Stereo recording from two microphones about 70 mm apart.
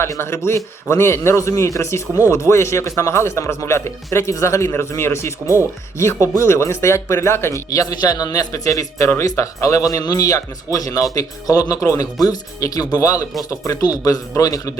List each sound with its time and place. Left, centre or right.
0.2 s speech: left
7.7 s a man's voice: left
12.2 s a man's voice: left